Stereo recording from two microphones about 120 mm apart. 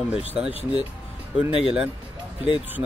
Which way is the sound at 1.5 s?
45° left (ahead or behind).